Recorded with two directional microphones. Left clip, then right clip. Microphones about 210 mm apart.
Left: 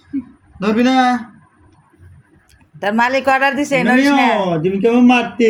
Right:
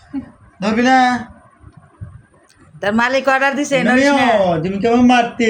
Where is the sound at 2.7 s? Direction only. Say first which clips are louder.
Even; centre (ahead or behind).